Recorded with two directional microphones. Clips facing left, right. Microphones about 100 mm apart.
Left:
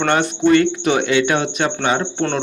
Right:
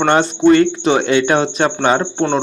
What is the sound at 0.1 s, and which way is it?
A man's voice, 30° right (ahead or behind).